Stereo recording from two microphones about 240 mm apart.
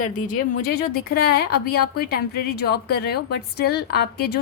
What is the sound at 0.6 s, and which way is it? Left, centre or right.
A woman's voice, left.